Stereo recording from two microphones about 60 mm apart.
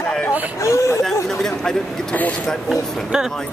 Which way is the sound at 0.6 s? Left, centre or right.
Left.